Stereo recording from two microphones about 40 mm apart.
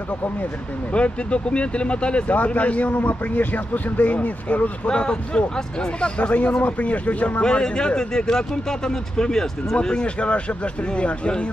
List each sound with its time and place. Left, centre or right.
0.9 s speech: left
2.3 s a man's voice: left
4.8 s speech: left
7.4 s speech: left